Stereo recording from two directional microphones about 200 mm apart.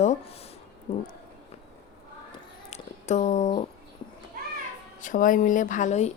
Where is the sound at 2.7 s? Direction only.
35° left (ahead or behind).